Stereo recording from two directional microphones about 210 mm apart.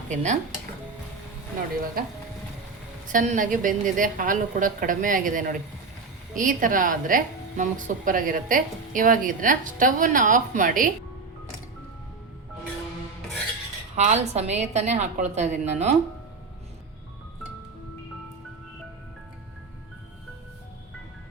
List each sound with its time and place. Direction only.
0.1 s a woman's voice: 35° right (ahead or behind)
3.1 s a woman's voice: 40° right (ahead or behind)
13.9 s a woman's voice: 30° right (ahead or behind)